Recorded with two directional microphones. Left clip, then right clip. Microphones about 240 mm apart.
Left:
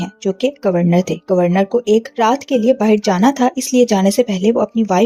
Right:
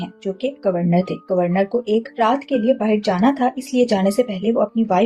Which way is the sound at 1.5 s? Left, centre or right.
Left.